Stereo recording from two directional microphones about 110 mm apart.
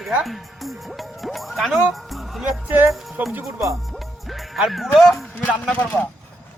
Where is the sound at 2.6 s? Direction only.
15° right (ahead or behind).